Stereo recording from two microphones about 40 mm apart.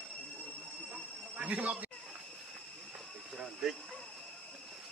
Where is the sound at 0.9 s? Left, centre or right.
Right.